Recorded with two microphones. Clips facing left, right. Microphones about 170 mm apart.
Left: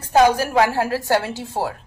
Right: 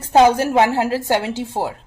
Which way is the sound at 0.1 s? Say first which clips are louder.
Right 2 dB; 25° right (ahead or behind).